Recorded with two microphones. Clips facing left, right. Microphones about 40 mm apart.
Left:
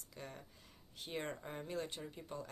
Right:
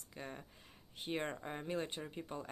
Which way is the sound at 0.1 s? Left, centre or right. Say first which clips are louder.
Right 3 dB; right.